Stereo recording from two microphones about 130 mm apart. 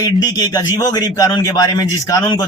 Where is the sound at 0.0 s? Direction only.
30° left (ahead or behind).